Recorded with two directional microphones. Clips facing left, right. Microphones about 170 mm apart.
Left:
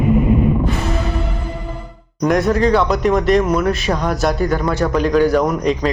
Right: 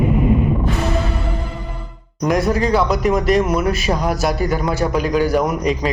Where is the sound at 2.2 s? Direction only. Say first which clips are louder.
Left 2 dB; centre (ahead or behind).